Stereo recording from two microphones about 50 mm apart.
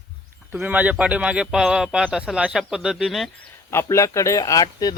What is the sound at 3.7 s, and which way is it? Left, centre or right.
Speech, left.